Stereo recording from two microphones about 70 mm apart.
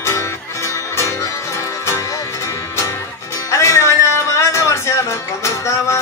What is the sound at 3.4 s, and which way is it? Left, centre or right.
Music, left.